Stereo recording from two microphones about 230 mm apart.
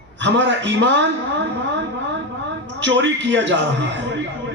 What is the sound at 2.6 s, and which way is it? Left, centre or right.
Speech, right.